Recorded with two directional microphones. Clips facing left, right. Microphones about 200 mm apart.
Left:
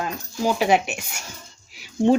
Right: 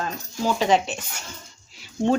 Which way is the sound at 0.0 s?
10° left (ahead or behind).